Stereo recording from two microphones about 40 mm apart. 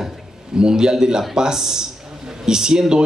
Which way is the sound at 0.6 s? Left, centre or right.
Centre.